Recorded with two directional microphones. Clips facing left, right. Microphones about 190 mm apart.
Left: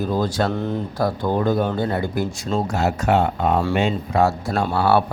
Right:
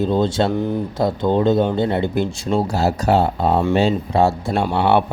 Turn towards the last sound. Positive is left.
turn(degrees=-25)  # may be behind; listen again after turning